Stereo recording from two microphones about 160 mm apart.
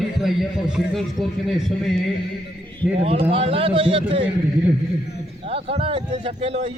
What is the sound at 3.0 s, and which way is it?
Speech, 40° right (ahead or behind).